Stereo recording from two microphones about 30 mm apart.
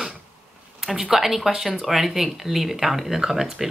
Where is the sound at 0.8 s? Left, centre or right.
Centre.